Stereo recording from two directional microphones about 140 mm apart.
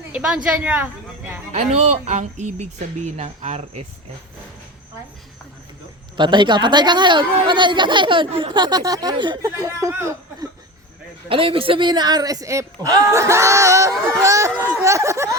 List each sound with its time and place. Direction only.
0.1 s a sound: 10° right (ahead or behind)
1.5 s speech: 55° right (ahead or behind)
6.1 s speech: 35° right (ahead or behind)
11.3 s speech: 40° right (ahead or behind); by 15.4 s 20° right (ahead or behind)